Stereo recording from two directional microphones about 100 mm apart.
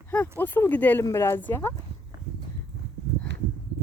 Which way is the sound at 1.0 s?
30° left (ahead or behind).